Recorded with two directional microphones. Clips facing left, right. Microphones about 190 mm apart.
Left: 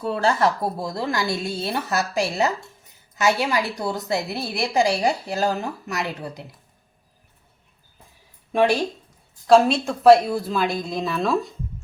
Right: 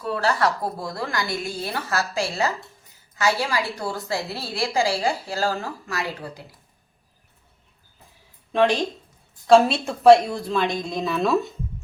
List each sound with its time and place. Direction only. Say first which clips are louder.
0.0 s a woman's voice: left 2 dB; 25° left (ahead or behind)
8.5 s speech: left 1 dB; 10° left (ahead or behind)
9.5 s a woman's voice: even; centre (ahead or behind)